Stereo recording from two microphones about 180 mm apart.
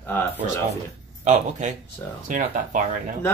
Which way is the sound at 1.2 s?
40° right (ahead or behind).